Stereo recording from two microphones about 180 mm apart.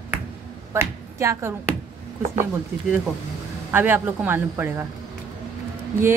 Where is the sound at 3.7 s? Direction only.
10° right (ahead or behind).